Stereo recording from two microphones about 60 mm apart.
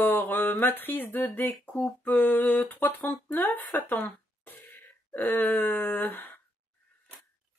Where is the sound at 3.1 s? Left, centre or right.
Left.